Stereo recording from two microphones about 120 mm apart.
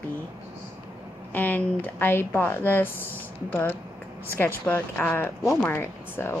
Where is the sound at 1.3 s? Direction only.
15° left (ahead or behind).